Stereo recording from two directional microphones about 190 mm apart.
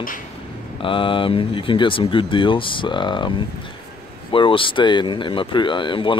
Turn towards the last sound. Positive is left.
turn(degrees=25)  # may be behind; listen again after turning